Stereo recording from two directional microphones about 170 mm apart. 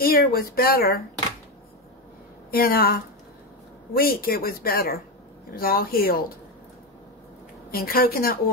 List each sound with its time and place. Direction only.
0.0 s speech: 60° left (ahead or behind)
2.5 s speech: 60° left (ahead or behind)
7.7 s speech: 60° left (ahead or behind)